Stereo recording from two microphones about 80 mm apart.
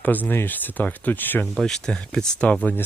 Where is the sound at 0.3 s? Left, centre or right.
Left.